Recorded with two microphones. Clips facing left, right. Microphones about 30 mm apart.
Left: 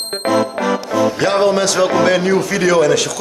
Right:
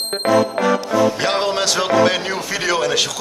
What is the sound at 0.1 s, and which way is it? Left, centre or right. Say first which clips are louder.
Music: even; centre.